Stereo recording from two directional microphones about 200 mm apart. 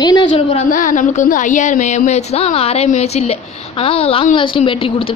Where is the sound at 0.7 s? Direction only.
40° left (ahead or behind).